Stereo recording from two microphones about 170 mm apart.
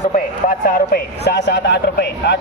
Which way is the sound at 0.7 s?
70° left (ahead or behind).